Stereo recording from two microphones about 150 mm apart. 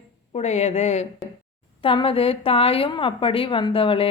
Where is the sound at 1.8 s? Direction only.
35° left (ahead or behind).